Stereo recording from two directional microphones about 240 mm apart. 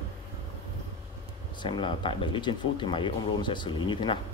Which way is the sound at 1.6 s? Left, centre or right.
Left.